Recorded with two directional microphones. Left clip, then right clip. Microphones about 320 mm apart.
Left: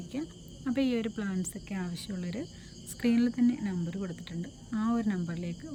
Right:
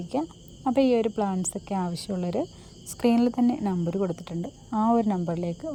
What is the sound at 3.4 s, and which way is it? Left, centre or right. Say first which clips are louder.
Speech: right 5 dB; centre.